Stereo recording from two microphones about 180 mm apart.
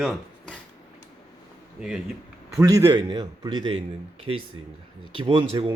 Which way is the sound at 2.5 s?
15° right (ahead or behind).